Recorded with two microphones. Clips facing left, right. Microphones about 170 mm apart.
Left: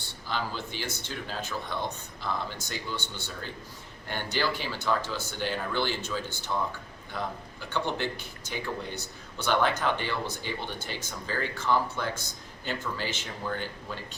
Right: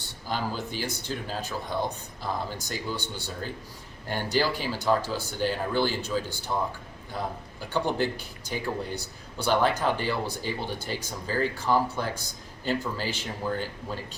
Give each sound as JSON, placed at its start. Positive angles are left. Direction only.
{"t": 0.3, "sound": "speech", "side_deg": -40}
{"t": 7.7, "sound": "speech", "side_deg": -40}